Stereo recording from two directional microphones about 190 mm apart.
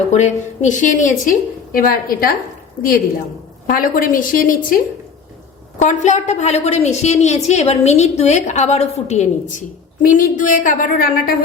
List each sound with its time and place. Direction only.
0.1 s a woman's voice: 40° left (ahead or behind)
3.7 s a woman's voice: 45° left (ahead or behind)
5.8 s a woman's voice: 40° left (ahead or behind)